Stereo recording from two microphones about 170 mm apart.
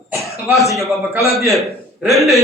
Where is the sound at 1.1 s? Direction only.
15° right (ahead or behind).